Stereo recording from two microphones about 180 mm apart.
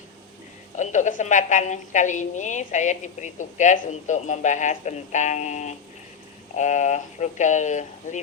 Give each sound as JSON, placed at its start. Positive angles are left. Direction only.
{"t": 0.8, "sound": "a woman's voice", "side_deg": 40}